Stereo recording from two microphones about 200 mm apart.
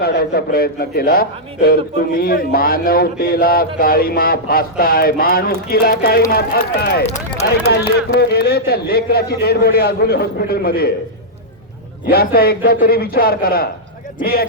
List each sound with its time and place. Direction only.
0.0 s a man's voice: 55° left (ahead or behind)
12.0 s a man's voice: 50° left (ahead or behind)